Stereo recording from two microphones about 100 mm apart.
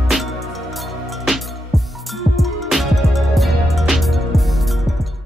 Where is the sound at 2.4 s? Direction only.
Centre (ahead or behind).